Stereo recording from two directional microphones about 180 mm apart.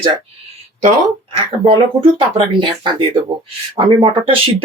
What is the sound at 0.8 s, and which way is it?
Speech, 40° right (ahead or behind).